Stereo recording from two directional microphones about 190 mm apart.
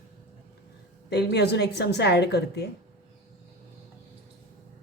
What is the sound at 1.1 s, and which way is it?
A woman's voice, 60° left (ahead or behind).